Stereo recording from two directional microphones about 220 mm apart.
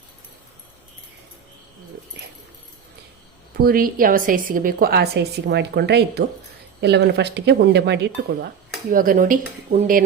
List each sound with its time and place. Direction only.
3.6 s a woman's voice: 40° right (ahead or behind)
8.9 s speech: 40° right (ahead or behind)